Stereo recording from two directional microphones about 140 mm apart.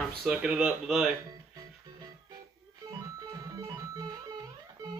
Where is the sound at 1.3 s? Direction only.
25° right (ahead or behind).